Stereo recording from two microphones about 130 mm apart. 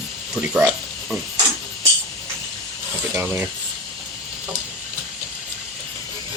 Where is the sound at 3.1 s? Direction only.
15° right (ahead or behind).